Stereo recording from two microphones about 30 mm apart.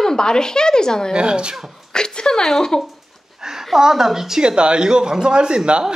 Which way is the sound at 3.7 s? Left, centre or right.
Centre.